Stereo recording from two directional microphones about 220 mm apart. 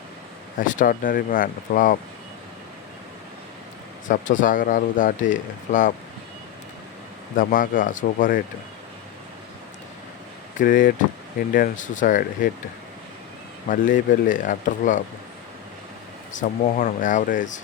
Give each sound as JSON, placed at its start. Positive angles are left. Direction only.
{"t": 0.6, "sound": "speech", "side_deg": 35}
{"t": 4.1, "sound": "speech", "side_deg": 35}
{"t": 7.3, "sound": "speech", "side_deg": 40}
{"t": 10.6, "sound": "speech", "side_deg": 40}
{"t": 13.7, "sound": "speech", "side_deg": 35}
{"t": 16.3, "sound": "speech", "side_deg": 35}